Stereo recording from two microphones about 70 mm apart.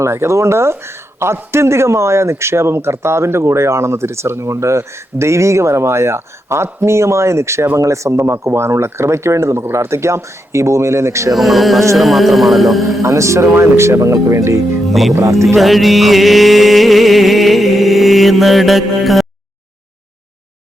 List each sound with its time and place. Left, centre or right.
0.0 s speech: right
11.3 s music: centre
13.0 s speech: right
14.8 s music: centre
15.1 s speech: right
15.4 s music: centre